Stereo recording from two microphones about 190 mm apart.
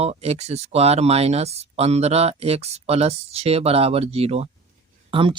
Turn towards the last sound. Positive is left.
turn(degrees=-25)  # may be behind; listen again after turning